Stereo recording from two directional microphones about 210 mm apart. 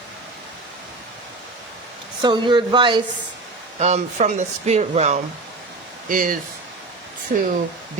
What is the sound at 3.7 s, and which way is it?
Speech, 30° right (ahead or behind).